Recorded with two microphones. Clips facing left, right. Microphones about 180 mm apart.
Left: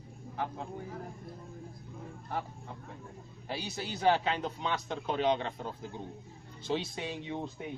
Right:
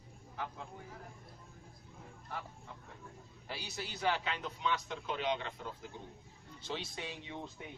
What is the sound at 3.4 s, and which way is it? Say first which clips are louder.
A man's voice: left 6 dB; 25° left (ahead or behind).